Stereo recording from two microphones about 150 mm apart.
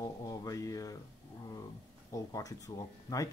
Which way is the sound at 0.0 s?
25° left (ahead or behind).